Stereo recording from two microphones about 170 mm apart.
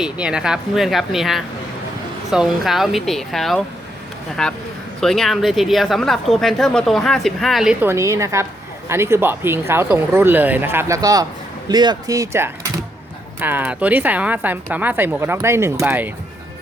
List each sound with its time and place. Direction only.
0.0 s a woman's voice: 5° right (ahead or behind)